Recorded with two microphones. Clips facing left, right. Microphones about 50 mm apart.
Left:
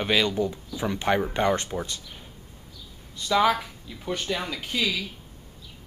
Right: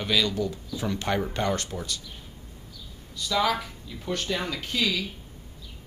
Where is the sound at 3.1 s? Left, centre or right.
Left.